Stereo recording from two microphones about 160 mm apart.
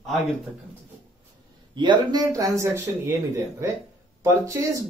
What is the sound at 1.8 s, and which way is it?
Speech, 25° right (ahead or behind).